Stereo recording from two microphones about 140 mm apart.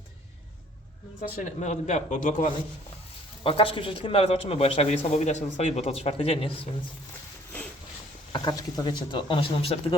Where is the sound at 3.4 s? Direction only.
40° left (ahead or behind).